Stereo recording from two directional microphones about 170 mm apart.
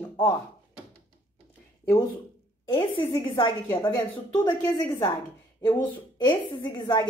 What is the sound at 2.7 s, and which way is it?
A woman's voice, 25° left (ahead or behind).